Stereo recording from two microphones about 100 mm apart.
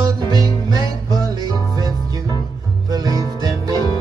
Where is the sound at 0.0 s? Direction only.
40° right (ahead or behind).